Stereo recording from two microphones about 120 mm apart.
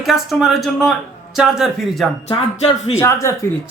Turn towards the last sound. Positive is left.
turn(degrees=20)  # may be behind; listen again after turning